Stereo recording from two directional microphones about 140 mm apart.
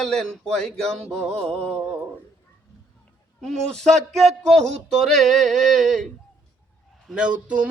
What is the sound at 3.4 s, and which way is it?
Music, 5° left (ahead or behind).